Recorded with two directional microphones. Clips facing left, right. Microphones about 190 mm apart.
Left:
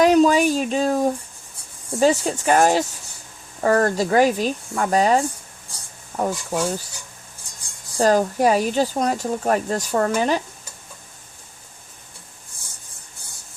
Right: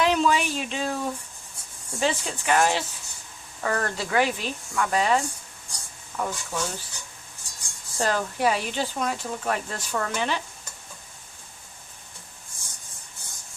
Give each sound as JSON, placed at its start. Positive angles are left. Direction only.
{"t": 0.0, "sound": "a sound", "side_deg": 40}
{"t": 2.0, "sound": "speech", "side_deg": 45}
{"t": 7.9, "sound": "speech", "side_deg": 40}